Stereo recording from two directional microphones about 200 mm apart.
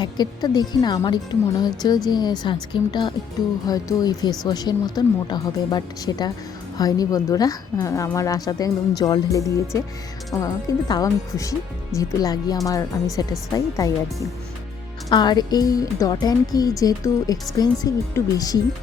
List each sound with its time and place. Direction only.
0.0 s a woman's voice: 20° left (ahead or behind)
15.1 s a woman's voice: 20° left (ahead or behind)